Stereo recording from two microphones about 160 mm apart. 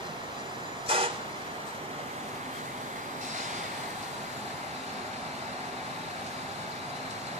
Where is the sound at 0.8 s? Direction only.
35° right (ahead or behind).